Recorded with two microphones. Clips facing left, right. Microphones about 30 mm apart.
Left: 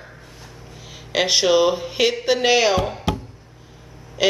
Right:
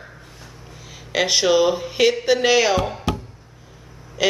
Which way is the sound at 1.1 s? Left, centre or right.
Centre.